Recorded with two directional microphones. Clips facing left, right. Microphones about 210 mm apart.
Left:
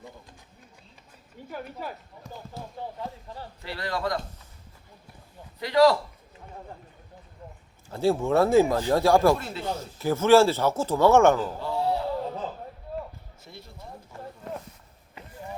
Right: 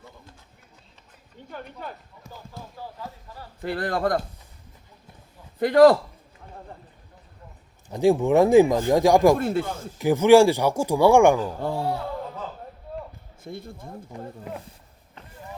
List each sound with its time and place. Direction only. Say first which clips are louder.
1.5 s speech: left 1 dB; 5° left (ahead or behind)
3.2 s speech: left 3 dB; 25° left (ahead or behind)
3.6 s speech: right 6 dB; 50° right (ahead or behind)
5.5 s speech: right 5 dB; 50° right (ahead or behind)
7.9 s speech: right 4 dB; 15° right (ahead or behind)
9.4 s speech: right 7 dB; 50° right (ahead or behind)
10.0 s speech: right 4 dB; 15° right (ahead or behind)
11.6 s speech: right 1 dB; 50° right (ahead or behind)
13.4 s speech: right 10 dB; 50° right (ahead or behind)
14.1 s speech: right 4 dB; 15° right (ahead or behind)